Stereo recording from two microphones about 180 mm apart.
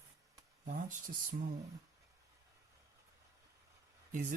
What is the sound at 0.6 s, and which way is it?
Speech, 50° right (ahead or behind).